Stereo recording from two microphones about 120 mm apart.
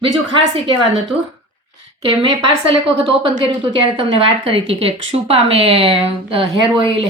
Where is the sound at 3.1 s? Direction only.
50° right (ahead or behind).